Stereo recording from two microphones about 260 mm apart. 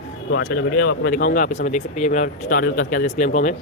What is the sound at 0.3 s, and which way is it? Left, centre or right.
A man's voice, left.